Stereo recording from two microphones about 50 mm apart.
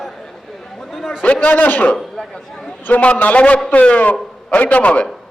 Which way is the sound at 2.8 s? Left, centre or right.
Left.